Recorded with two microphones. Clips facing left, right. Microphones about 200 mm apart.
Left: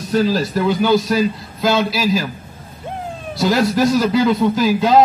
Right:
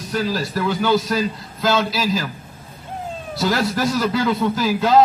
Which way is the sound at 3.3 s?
15° left (ahead or behind).